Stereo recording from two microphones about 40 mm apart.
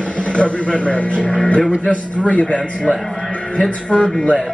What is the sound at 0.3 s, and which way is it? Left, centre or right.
A man's voice, left.